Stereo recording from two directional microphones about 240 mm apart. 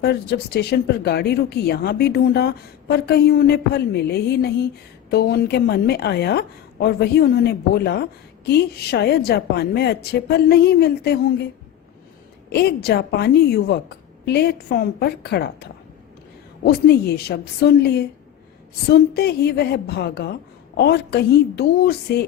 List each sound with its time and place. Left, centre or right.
0.0 s speech: left
12.5 s a woman's voice: left